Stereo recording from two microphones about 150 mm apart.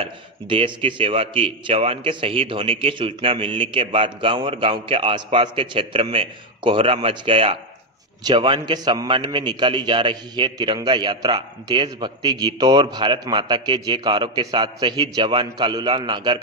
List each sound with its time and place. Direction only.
0.0 s a man's voice: 35° right (ahead or behind)